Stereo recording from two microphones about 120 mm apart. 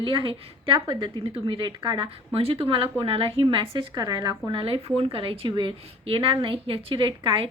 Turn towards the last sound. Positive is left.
turn(degrees=-45)  # may be behind; listen again after turning